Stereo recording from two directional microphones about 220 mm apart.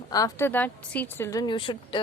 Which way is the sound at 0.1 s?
15° left (ahead or behind).